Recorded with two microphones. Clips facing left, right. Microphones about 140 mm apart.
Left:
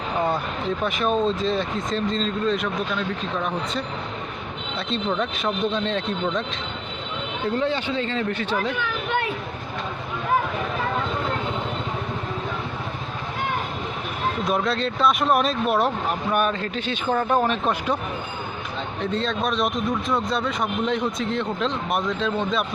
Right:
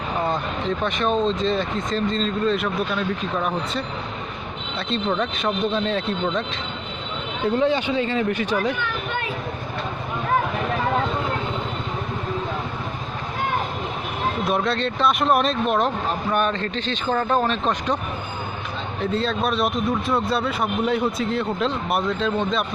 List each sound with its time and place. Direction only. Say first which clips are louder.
0.9 s speech: even; 5° left (ahead or behind)
5.1 s speech: right 1 dB; centre (ahead or behind)
7.5 s speech: right 4 dB; 15° right (ahead or behind)
8.8 s children playing: left 2 dB; 75° left (ahead or behind)
14.4 s speech: right 1 dB; centre (ahead or behind)
19.1 s speech: right 2 dB; 5° right (ahead or behind)